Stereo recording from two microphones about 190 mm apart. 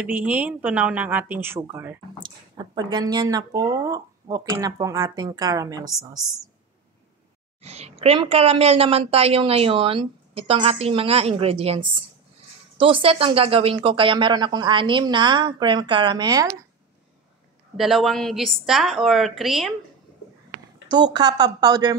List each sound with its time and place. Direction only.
0.0 s speech: 5° right (ahead or behind)
2.2 s speech: 20° right (ahead or behind)
7.6 s a woman's voice: 35° right (ahead or behind)
17.7 s a woman's voice: centre (ahead or behind)
20.9 s speech: 20° right (ahead or behind)